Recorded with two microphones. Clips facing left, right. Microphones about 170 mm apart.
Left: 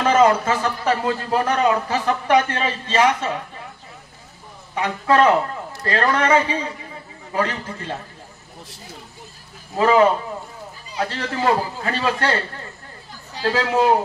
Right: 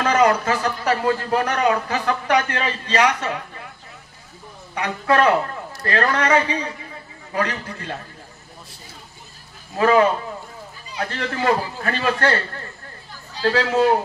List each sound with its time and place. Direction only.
0.0 s a man's voice: 25° left (ahead or behind)
4.7 s a man's voice: 20° left (ahead or behind)
9.8 s a man's voice: 20° left (ahead or behind)
13.5 s a man's voice: 20° left (ahead or behind)